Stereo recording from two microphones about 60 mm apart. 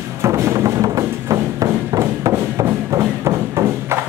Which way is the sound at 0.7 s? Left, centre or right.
Right.